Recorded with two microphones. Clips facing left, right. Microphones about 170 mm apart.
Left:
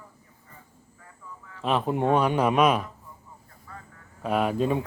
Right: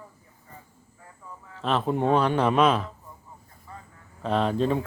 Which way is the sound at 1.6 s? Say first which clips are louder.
Even; 10° left (ahead or behind).